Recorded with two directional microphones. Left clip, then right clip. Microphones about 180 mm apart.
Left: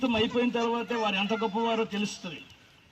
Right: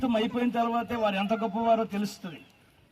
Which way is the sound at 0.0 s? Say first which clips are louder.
Left 1 dB; 45° right (ahead or behind).